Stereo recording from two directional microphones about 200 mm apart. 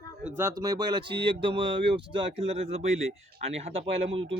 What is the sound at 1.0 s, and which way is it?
Speech, 55° right (ahead or behind).